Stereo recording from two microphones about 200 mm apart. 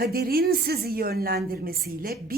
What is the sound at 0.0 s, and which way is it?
Speech, 50° right (ahead or behind).